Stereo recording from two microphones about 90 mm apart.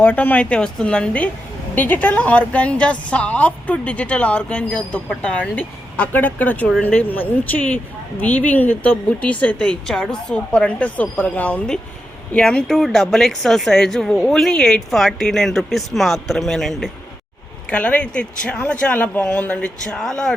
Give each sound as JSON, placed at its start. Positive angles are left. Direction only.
{"t": 0.0, "sound": "a woman's voice", "side_deg": 20}
{"t": 17.7, "sound": "a woman's voice", "side_deg": 15}